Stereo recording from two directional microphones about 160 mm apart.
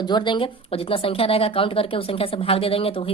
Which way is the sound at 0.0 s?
25° left (ahead or behind).